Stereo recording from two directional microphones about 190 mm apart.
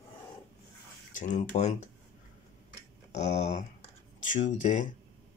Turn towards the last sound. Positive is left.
turn(degrees=40)  # may be behind; listen again after turning